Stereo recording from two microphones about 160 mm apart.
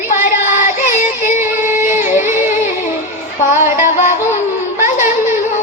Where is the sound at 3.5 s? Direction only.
50° left (ahead or behind).